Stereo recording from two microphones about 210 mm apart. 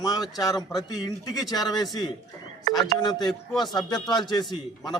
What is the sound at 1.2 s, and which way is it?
A man's voice, 15° left (ahead or behind).